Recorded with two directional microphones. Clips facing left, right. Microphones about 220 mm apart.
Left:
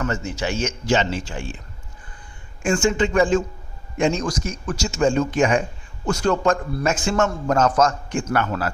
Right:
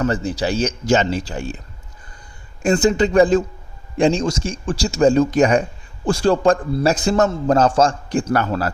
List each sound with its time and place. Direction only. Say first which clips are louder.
0.0 s speech: right 5 dB; 35° right (ahead or behind)